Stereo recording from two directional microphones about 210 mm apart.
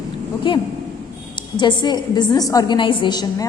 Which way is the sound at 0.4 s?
25° left (ahead or behind).